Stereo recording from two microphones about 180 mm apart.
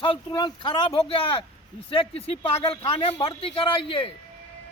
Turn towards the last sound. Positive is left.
turn(degrees=30)  # may be behind; listen again after turning